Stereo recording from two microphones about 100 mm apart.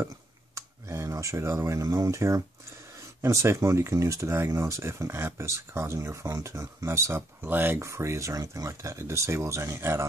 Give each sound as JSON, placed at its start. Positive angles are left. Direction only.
{"t": 0.6, "sound": "speech", "side_deg": -30}